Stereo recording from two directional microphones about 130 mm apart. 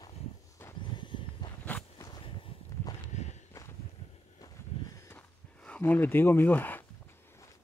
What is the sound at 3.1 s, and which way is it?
Walk, 60° left (ahead or behind).